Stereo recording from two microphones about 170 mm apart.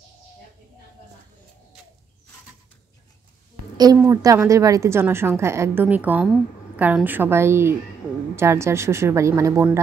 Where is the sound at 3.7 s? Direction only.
20° right (ahead or behind).